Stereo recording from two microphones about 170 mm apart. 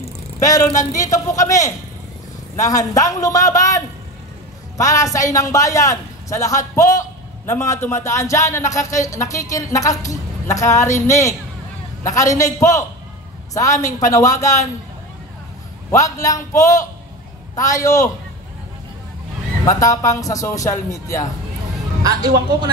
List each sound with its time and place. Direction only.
0.4 s a man's voice: 20° left (ahead or behind)
15.9 s a man's voice: 20° left (ahead or behind)
19.6 s a man's voice: 20° left (ahead or behind)
22.0 s speech: 25° right (ahead or behind)